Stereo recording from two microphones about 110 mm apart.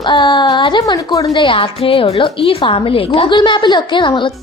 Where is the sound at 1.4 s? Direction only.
55° left (ahead or behind).